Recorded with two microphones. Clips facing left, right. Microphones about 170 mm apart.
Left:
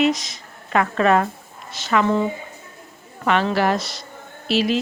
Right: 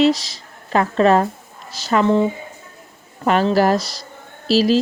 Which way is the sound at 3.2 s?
40° right (ahead or behind).